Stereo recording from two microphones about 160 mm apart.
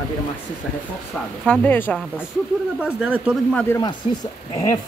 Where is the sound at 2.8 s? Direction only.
5° right (ahead or behind).